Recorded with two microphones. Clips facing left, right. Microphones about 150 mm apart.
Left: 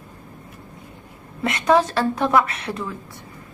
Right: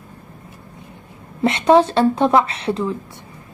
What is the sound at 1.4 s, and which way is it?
Speech, 25° right (ahead or behind).